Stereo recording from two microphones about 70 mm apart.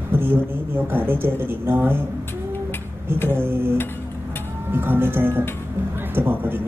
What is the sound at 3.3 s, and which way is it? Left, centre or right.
Speech, right.